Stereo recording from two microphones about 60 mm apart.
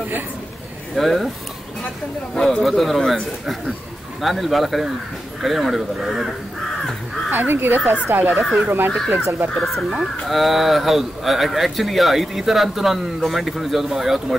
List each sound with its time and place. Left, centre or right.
0.9 s speech: centre
2.3 s speech: centre
2.6 s speech: centre
4.2 s speech: centre
7.2 s speech: right
9.5 s speech: centre